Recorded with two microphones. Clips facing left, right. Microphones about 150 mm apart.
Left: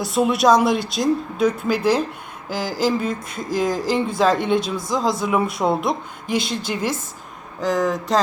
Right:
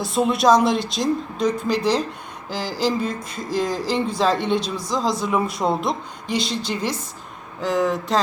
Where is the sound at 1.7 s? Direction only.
50° left (ahead or behind).